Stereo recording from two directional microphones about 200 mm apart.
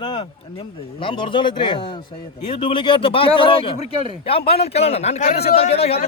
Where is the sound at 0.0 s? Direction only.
25° left (ahead or behind).